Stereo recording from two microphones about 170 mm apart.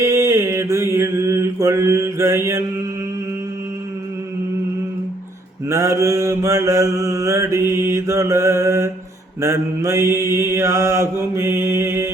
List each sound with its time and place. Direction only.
0.0 s mantra: 15° right (ahead or behind)
5.6 s mantra: 15° right (ahead or behind)